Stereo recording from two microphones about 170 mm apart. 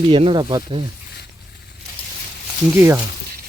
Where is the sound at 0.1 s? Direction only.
30° right (ahead or behind).